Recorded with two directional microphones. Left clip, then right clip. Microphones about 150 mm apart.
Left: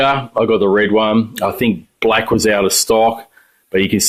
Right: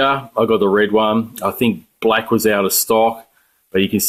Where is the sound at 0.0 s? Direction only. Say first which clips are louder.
Left 2 dB; 25° left (ahead or behind).